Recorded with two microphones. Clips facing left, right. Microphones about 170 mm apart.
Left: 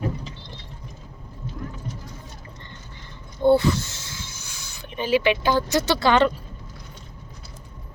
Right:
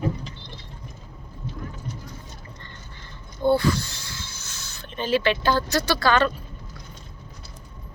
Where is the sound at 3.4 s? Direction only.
20° left (ahead or behind).